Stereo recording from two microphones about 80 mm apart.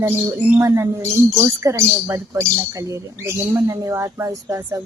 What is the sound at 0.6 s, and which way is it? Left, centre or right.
A woman's voice, right.